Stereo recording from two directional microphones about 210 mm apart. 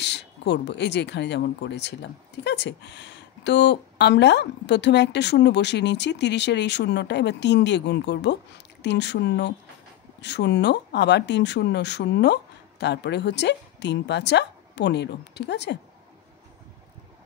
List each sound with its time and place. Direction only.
0.0 s speech: 55° left (ahead or behind)